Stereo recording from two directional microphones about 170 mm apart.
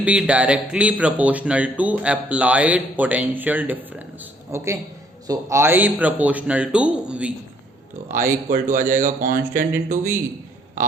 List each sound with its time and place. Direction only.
0.0 s speech: 10° right (ahead or behind)
8.0 s speech: 50° right (ahead or behind)